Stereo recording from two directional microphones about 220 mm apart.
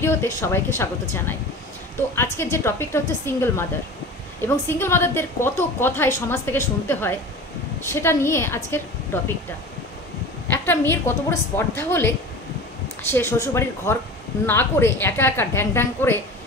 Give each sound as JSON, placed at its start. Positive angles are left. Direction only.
{"t": 0.0, "sound": "a woman's voice", "side_deg": 10}
{"t": 2.1, "sound": "a woman's voice", "side_deg": 10}
{"t": 10.5, "sound": "a woman's voice", "side_deg": 10}
{"t": 13.1, "sound": "a woman's voice", "side_deg": 10}